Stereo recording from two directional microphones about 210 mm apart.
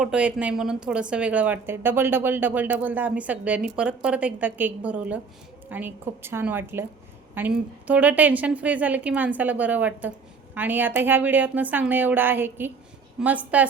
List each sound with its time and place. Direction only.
0.0 s a woman's voice: 5° right (ahead or behind)